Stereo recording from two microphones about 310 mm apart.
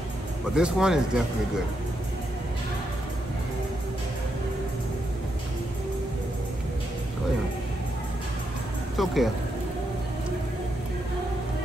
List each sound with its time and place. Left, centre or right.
0.6 s speech: centre
8.9 s speech: centre